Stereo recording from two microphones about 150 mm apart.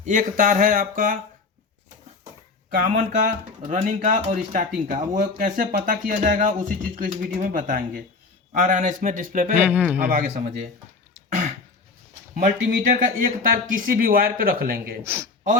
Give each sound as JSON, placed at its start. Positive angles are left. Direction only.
{"t": 0.0, "sound": "speech", "side_deg": -60}
{"t": 2.6, "sound": "speech", "side_deg": -60}
{"t": 9.6, "sound": "speech", "side_deg": -10}
{"t": 10.4, "sound": "speech", "side_deg": -90}
{"t": 12.4, "sound": "speech", "side_deg": -60}
{"t": 15.0, "sound": "speech", "side_deg": -15}